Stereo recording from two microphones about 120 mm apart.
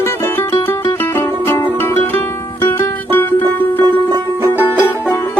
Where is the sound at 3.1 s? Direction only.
15° left (ahead or behind).